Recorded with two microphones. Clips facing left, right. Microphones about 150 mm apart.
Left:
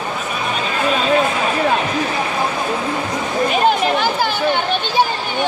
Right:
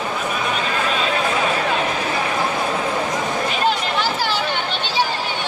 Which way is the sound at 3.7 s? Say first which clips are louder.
Left 5 dB; 50° left (ahead or behind).